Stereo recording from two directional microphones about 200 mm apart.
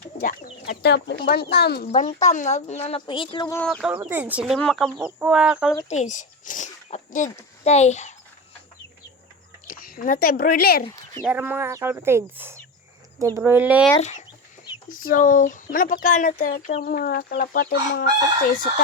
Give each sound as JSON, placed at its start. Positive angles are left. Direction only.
{"t": 0.8, "sound": "speech", "side_deg": 60}
{"t": 1.9, "sound": "speech", "side_deg": 35}
{"t": 3.5, "sound": "speech", "side_deg": 5}
{"t": 5.9, "sound": "a child's voice", "side_deg": 35}
{"t": 9.6, "sound": "speech", "side_deg": 40}
{"t": 11.2, "sound": "speech", "side_deg": -5}
{"t": 14.0, "sound": "speech", "side_deg": 35}